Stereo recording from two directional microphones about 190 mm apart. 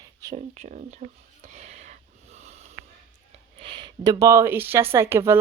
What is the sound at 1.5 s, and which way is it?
Sniff, 35° right (ahead or behind).